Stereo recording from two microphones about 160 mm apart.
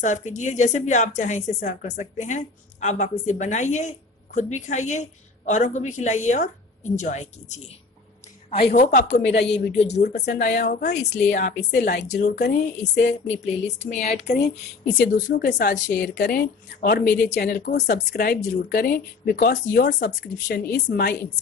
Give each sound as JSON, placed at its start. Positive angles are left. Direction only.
{"t": 0.0, "sound": "a woman's voice", "side_deg": 50}
{"t": 10.2, "sound": "speech", "side_deg": 90}
{"t": 13.3, "sound": "a woman's voice", "side_deg": 45}
{"t": 15.0, "sound": "a woman's voice", "side_deg": 80}
{"t": 17.8, "sound": "speech", "side_deg": 85}